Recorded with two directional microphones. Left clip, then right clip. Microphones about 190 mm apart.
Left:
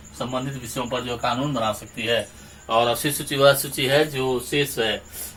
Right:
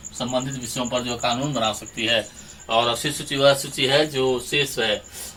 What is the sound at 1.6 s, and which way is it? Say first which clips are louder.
Speech: right 1 dB; 5° left (ahead or behind).